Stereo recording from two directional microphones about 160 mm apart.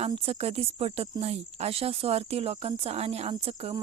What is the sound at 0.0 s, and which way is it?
Speech, 40° right (ahead or behind).